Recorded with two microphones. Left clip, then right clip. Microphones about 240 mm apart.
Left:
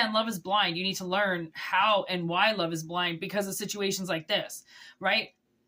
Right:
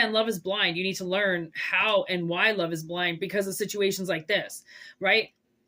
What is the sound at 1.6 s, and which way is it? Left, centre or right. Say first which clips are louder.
Speech: left 1 dB; left.